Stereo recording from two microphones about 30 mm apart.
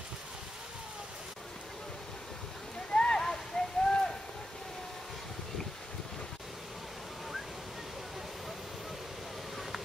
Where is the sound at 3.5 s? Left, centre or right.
Left.